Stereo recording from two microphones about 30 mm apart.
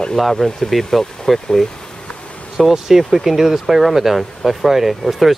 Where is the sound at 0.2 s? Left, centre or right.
Centre.